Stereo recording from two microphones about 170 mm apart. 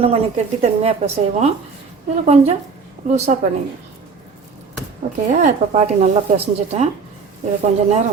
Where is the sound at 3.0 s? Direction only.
45° right (ahead or behind).